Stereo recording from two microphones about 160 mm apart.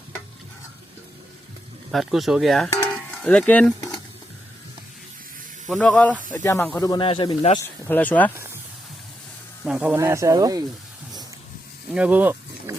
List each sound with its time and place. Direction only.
1.9 s a sound: centre (ahead or behind)
5.6 s speech: centre (ahead or behind)
6.8 s speech: 25° left (ahead or behind)
7.1 s speech: 35° left (ahead or behind)
7.9 s speech: 10° left (ahead or behind)
9.6 s speech: 5° right (ahead or behind)
11.9 s a sound: 10° right (ahead or behind)